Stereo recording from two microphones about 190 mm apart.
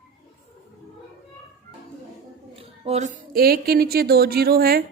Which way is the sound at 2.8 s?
35° right (ahead or behind).